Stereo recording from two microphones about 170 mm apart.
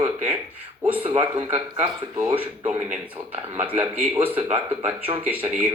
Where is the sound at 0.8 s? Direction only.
10° right (ahead or behind).